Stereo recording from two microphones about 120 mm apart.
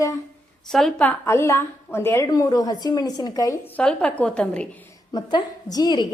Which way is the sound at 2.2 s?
30° left (ahead or behind).